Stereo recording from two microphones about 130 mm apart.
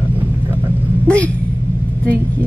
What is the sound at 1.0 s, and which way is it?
Speech, 10° left (ahead or behind).